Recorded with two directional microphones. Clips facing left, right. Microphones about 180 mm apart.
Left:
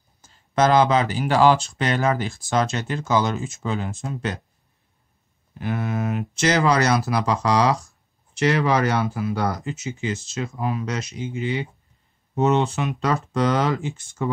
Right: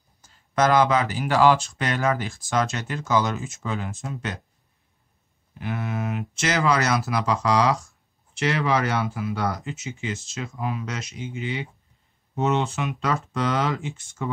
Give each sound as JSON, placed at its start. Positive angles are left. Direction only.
{"t": 0.6, "sound": "speech", "side_deg": 30}
{"t": 5.6, "sound": "speech", "side_deg": 40}